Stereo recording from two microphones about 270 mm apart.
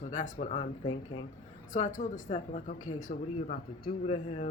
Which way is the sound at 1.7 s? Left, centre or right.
Left.